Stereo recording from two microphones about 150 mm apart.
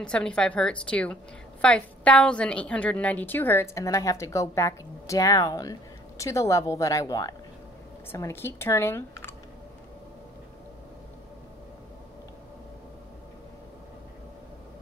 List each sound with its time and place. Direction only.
0.0 s a woman's voice: 5° left (ahead or behind)